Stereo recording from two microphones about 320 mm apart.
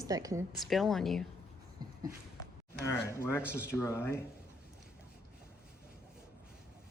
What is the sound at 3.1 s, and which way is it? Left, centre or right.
Speech, centre.